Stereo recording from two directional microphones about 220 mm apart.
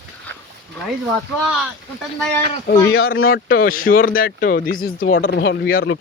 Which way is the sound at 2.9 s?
65° left (ahead or behind).